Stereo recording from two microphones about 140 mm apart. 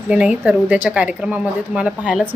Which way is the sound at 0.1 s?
10° right (ahead or behind).